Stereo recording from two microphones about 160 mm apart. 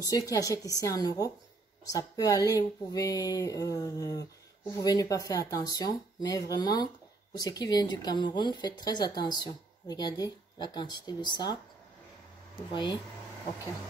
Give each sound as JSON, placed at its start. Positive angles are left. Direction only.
{"t": 0.0, "sound": "speech", "side_deg": 20}
{"t": 12.7, "sound": "speech", "side_deg": 30}